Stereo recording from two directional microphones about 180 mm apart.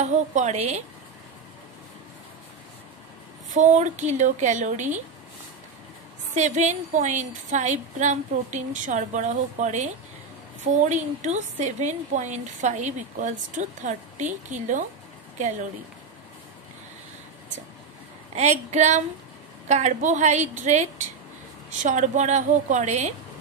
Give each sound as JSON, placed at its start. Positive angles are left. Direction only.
{"t": 0.0, "sound": "a woman's voice", "side_deg": -40}
{"t": 3.4, "sound": "a woman's voice", "side_deg": -40}
{"t": 6.3, "sound": "a woman's voice", "side_deg": -40}
{"t": 18.3, "sound": "a woman's voice", "side_deg": -40}